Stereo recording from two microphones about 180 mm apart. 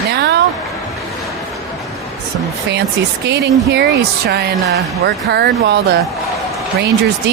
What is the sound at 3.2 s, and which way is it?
Speech, 70° right (ahead or behind).